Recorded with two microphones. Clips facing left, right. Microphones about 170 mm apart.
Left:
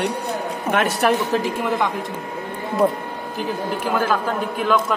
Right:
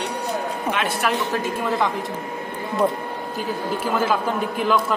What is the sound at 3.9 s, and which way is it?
A man's voice, 10° right (ahead or behind).